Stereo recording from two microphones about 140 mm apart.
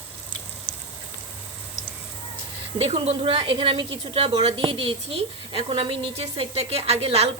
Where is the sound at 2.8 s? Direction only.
45° right (ahead or behind).